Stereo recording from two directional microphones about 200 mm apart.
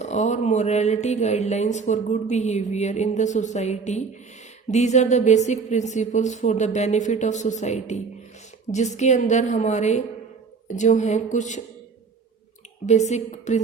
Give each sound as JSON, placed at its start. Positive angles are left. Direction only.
{"t": 0.0, "sound": "speech", "side_deg": 35}
{"t": 12.8, "sound": "speech", "side_deg": 35}